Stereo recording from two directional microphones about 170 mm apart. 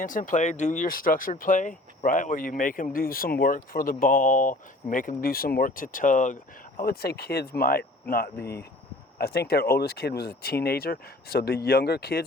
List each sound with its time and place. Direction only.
0.0 s speech: 50° left (ahead or behind); by 12.2 s 70° left (ahead or behind)